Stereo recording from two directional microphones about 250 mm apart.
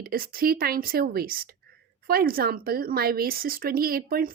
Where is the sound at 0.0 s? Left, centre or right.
Right.